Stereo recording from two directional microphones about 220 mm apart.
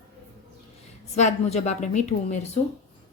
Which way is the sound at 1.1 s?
30° left (ahead or behind).